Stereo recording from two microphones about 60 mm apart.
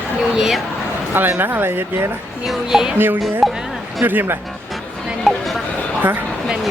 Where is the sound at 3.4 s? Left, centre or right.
Centre.